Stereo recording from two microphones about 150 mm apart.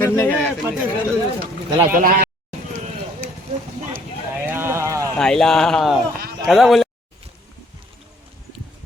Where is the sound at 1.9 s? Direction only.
65° right (ahead or behind).